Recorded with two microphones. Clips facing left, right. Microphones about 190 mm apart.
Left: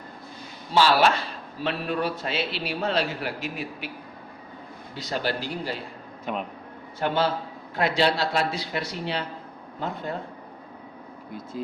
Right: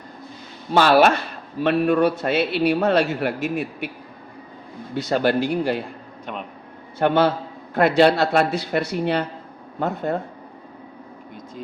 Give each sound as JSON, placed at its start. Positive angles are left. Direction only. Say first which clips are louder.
{"t": 0.7, "sound": "a man's voice", "louder": "right 5 dB", "side_deg": -55}
{"t": 5.0, "sound": "a man's voice", "louder": "right 9 dB", "side_deg": -55}
{"t": 6.3, "sound": "a sound", "louder": "left 2 dB", "side_deg": 5}
{"t": 7.0, "sound": "a man's voice", "louder": "right 6 dB", "side_deg": -60}